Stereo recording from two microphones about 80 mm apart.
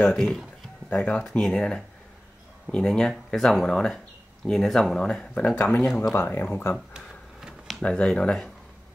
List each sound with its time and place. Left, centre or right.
0.0 s speech: centre
5.6 s speech: left
6.9 s a sound: centre
7.8 s speech: centre